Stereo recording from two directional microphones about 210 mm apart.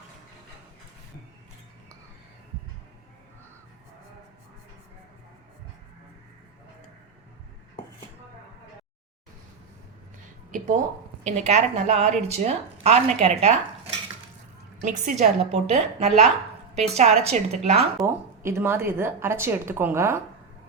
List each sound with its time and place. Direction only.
11.2 s a woman's voice: 30° right (ahead or behind)
18.0 s speech: 10° right (ahead or behind)